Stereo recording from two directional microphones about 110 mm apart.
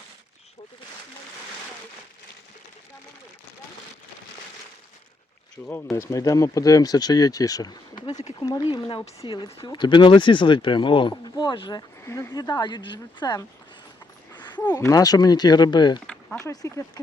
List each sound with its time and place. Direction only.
5.6 s speech: 20° left (ahead or behind)
8.6 s speech: 50° left (ahead or behind)
12.0 s speech: 25° left (ahead or behind)
12.3 s speech: 40° left (ahead or behind)
14.3 s a sound: 40° left (ahead or behind)
14.8 s speech: 30° left (ahead or behind)
16.4 s speech: 25° left (ahead or behind)